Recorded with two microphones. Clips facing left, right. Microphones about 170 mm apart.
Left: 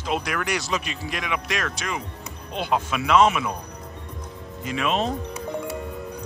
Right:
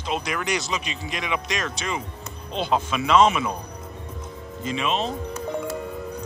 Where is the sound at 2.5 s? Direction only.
10° left (ahead or behind).